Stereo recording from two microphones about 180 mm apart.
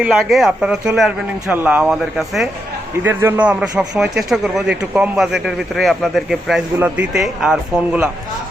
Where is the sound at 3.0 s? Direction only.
10° right (ahead or behind).